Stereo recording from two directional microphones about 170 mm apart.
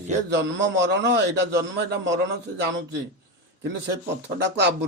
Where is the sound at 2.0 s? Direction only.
90° right.